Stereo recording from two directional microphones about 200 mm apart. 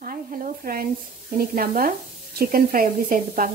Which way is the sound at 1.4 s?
45° right (ahead or behind).